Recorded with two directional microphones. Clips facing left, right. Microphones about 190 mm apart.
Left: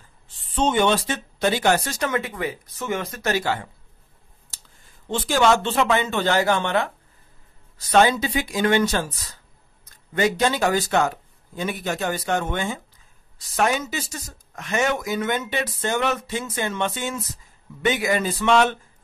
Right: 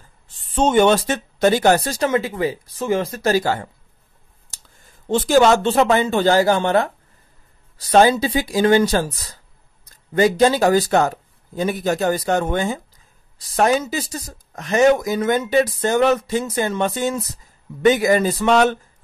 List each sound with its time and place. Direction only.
0.6 s speech: 45° right (ahead or behind)
5.0 s speech: 40° right (ahead or behind)